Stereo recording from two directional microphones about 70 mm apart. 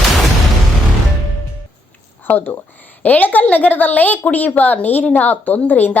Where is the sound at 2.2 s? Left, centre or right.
Left.